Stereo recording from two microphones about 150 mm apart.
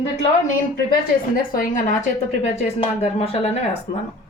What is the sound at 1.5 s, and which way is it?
A woman's voice, 60° left (ahead or behind).